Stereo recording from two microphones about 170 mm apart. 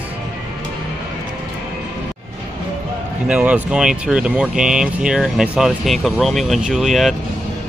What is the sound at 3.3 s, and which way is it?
Speech, 5° right (ahead or behind).